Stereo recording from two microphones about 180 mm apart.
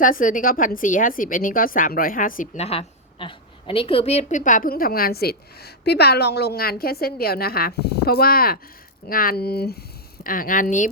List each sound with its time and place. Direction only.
0.0 s a woman's voice: 50° left (ahead or behind)
10.2 s a woman's voice: 50° left (ahead or behind)